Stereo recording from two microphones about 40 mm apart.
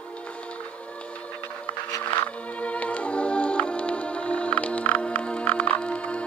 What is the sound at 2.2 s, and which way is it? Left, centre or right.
Music, left.